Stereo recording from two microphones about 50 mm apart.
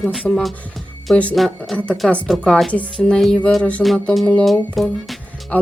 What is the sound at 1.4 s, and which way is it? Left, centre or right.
Speech, centre.